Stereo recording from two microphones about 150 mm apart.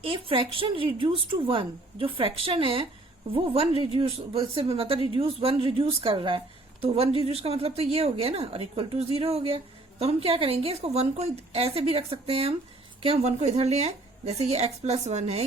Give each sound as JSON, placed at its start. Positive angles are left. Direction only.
{"t": 0.0, "sound": "speech", "side_deg": -35}